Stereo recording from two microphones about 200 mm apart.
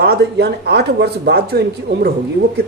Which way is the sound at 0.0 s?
55° right (ahead or behind).